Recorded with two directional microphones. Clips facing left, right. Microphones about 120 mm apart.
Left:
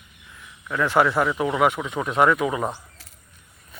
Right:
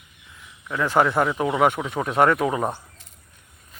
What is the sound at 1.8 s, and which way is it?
Speech, 20° right (ahead or behind).